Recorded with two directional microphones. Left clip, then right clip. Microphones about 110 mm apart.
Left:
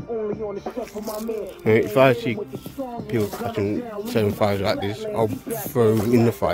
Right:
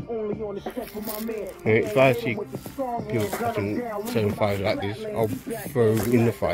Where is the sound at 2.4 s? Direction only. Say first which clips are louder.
Even; 20° right (ahead or behind).